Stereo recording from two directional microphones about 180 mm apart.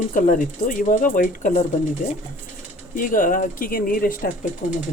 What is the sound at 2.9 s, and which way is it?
Speech, 50° left (ahead or behind).